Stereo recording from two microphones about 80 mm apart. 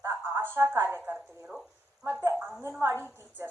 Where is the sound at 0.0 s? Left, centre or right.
Right.